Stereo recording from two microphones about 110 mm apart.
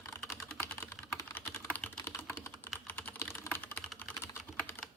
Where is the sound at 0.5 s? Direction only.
20° left (ahead or behind).